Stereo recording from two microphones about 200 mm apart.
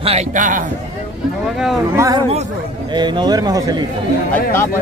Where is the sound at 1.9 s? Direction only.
15° right (ahead or behind).